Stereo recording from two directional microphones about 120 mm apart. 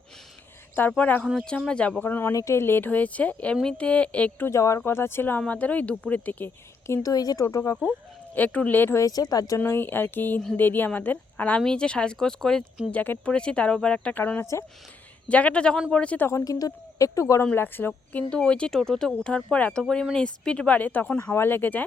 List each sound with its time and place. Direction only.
0.8 s speech: 15° left (ahead or behind)
8.4 s speech: 15° left (ahead or behind); by 9.6 s 30° left (ahead or behind)
9.6 s speech: 20° left (ahead or behind)
16.3 s speech: 30° left (ahead or behind); by 21.8 s 15° left (ahead or behind)